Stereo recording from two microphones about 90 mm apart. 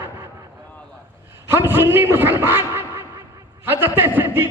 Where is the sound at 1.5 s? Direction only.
25° right (ahead or behind).